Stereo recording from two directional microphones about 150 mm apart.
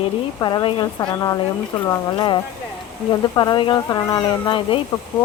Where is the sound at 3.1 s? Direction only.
30° left (ahead or behind).